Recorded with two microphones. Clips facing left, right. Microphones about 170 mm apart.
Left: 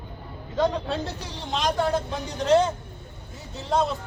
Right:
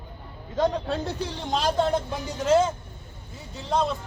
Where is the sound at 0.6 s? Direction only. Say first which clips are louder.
Even; 45° right (ahead or behind).